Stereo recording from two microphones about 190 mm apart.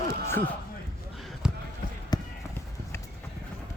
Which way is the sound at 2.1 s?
20° left (ahead or behind).